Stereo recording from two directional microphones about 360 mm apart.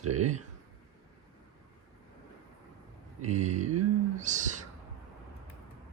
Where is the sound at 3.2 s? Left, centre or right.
Centre.